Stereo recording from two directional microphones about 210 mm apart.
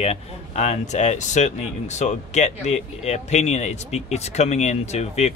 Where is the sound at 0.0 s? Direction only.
30° left (ahead or behind).